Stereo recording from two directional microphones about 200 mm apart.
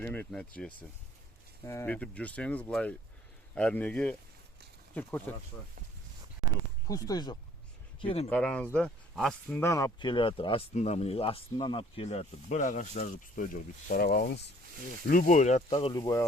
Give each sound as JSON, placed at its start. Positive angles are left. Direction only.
{"t": 0.0, "sound": "speech", "side_deg": 10}
{"t": 6.8, "sound": "speech", "side_deg": 20}
{"t": 8.0, "sound": "speech", "side_deg": 30}
{"t": 8.3, "sound": "speech", "side_deg": 5}
{"t": 9.6, "sound": "speech", "side_deg": 15}
{"t": 15.0, "sound": "speech", "side_deg": 45}